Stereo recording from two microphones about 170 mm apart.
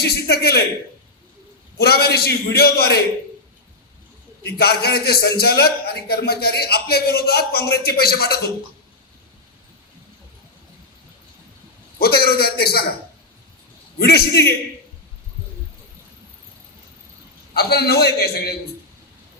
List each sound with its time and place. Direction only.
0.0 s a man's voice: 70° left (ahead or behind)
1.8 s a man's voice: 65° left (ahead or behind)
4.4 s a man's voice: 65° left (ahead or behind)
11.9 s a man's voice: 65° left (ahead or behind)
14.0 s a man's voice: 70° left (ahead or behind)
17.5 s a man's voice: 70° left (ahead or behind)